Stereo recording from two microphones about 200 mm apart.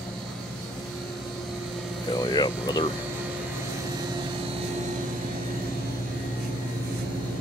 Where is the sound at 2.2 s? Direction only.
20° left (ahead or behind).